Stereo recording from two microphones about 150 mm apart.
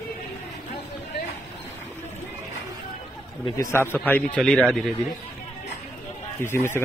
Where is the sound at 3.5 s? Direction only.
20° left (ahead or behind).